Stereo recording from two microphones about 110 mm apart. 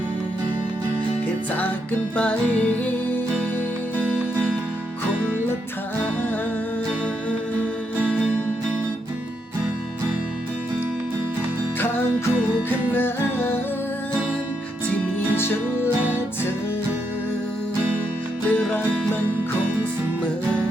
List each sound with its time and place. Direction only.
2.1 s music: 10° left (ahead or behind)
12.9 s music: 20° left (ahead or behind)
15.4 s music: 20° left (ahead or behind)
18.4 s music: 15° left (ahead or behind)